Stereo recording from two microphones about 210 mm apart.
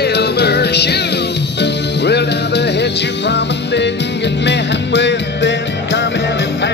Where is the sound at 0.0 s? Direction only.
50° left (ahead or behind).